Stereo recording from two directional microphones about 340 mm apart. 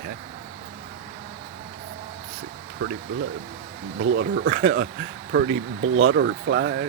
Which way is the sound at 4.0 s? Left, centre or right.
Right.